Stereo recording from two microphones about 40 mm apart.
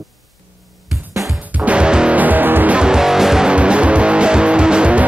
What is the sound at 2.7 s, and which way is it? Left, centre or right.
Music, right.